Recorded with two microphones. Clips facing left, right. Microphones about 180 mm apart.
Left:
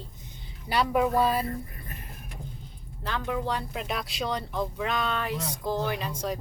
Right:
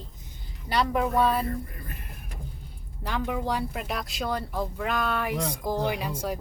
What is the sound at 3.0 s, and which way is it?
A woman's voice, 10° right (ahead or behind).